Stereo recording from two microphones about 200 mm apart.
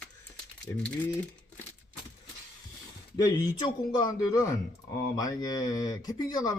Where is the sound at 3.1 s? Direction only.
20° left (ahead or behind).